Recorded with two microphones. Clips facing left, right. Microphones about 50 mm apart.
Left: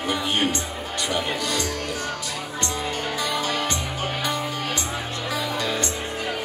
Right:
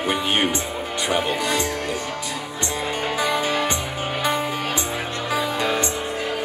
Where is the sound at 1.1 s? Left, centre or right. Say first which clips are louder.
Right 4 dB; right.